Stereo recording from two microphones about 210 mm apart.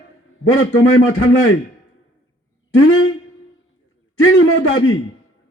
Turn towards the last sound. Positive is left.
turn(degrees=70)  # may be behind; listen again after turning